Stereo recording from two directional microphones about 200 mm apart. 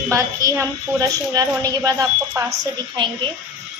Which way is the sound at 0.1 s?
15° right (ahead or behind).